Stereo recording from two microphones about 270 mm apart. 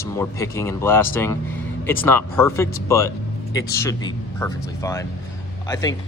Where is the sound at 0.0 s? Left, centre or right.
Centre.